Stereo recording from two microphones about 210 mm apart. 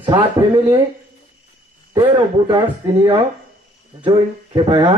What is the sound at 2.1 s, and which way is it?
A man's voice, 20° right (ahead or behind).